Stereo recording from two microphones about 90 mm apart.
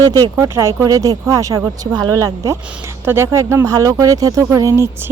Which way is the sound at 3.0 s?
25° right (ahead or behind).